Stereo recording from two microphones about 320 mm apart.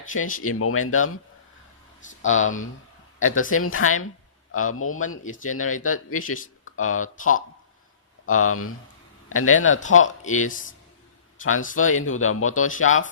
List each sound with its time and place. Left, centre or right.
0.4 s speech: left
2.2 s speech: left
11.8 s speech: left